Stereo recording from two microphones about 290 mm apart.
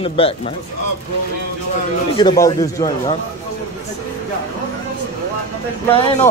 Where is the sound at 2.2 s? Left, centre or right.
Centre.